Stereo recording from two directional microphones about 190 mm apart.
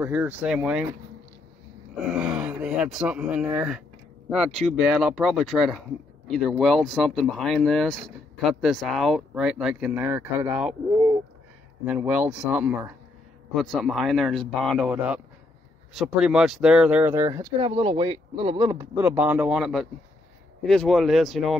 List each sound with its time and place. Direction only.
0.0 s speech: 10° right (ahead or behind)
2.0 s speech: 5° right (ahead or behind)
11.8 s speech: 10° right (ahead or behind); by 18.7 s 25° right (ahead or behind)
18.7 s speech: 15° right (ahead or behind)